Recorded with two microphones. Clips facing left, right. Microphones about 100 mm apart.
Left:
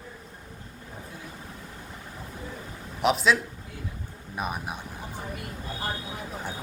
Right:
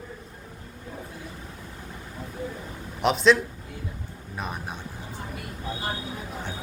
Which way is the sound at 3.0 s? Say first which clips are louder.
Right 3 dB; centre (ahead or behind).